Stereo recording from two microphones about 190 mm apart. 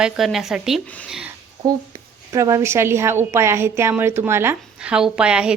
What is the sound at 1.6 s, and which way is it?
A woman's voice, 20° right (ahead or behind).